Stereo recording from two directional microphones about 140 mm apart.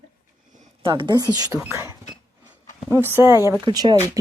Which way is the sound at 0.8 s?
35° right (ahead or behind).